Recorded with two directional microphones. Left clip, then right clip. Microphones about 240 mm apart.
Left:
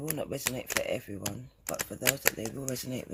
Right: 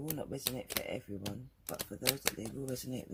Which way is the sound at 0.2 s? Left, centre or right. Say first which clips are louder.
Left 7 dB; left.